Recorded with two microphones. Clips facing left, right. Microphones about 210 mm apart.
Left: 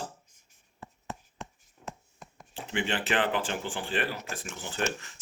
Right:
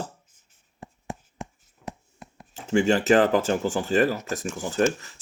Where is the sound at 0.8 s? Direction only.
10° right (ahead or behind).